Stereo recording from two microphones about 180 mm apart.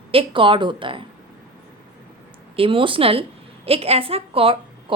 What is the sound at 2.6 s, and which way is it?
A woman's voice, 30° right (ahead or behind).